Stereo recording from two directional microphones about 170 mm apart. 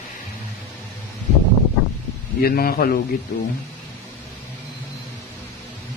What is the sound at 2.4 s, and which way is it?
Speech, 60° left (ahead or behind).